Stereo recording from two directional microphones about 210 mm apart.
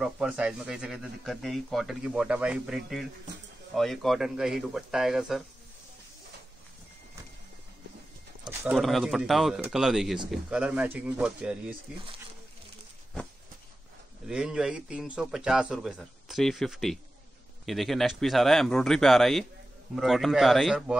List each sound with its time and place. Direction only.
0.0 s speech: 5° right (ahead or behind)
8.5 s speech: 5° right (ahead or behind)
14.2 s speech: 5° right (ahead or behind)